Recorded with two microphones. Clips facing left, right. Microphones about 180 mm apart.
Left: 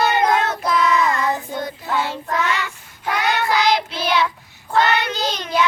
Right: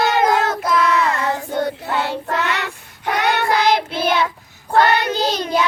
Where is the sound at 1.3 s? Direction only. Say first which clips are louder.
Right 4 dB; 70° right (ahead or behind); by 4.3 s 50° right (ahead or behind).